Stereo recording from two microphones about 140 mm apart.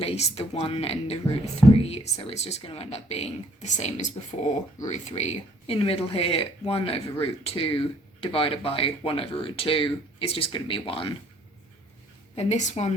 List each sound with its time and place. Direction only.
0.0 s speech: 45° left (ahead or behind)
12.4 s speech: 55° left (ahead or behind)